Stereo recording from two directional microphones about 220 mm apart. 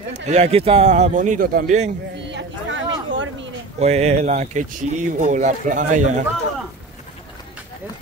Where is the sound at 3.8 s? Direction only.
30° right (ahead or behind).